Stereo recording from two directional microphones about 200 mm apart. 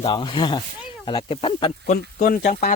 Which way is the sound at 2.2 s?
45° left (ahead or behind).